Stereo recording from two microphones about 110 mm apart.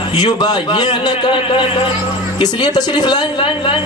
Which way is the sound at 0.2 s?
40° left (ahead or behind).